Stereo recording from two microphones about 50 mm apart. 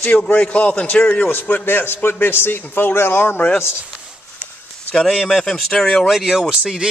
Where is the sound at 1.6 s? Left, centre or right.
Left.